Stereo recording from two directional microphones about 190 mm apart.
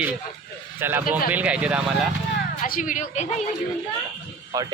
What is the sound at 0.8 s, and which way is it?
Speech, 10° right (ahead or behind).